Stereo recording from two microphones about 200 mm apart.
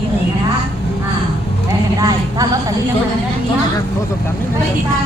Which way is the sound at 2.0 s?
15° right (ahead or behind).